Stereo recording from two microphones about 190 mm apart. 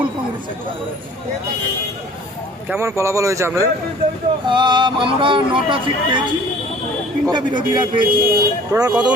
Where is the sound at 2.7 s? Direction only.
15° right (ahead or behind).